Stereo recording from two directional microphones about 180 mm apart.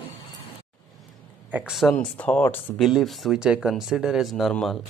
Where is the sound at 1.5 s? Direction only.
5° right (ahead or behind).